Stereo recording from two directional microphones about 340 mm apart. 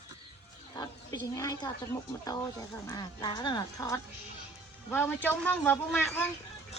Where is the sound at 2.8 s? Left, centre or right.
Centre.